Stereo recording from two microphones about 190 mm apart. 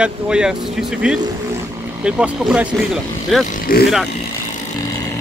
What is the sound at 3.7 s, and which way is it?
Speech, 50° left (ahead or behind).